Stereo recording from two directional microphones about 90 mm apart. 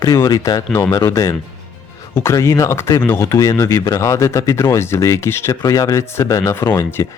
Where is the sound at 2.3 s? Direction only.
35° left (ahead or behind).